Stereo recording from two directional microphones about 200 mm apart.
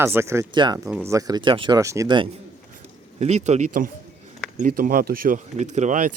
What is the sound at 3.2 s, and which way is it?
Speech, 35° right (ahead or behind).